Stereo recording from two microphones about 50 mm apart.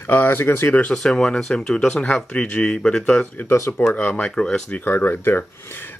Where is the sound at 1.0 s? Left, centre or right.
Centre.